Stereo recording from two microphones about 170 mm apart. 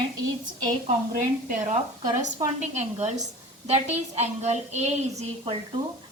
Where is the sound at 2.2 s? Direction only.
45° right (ahead or behind).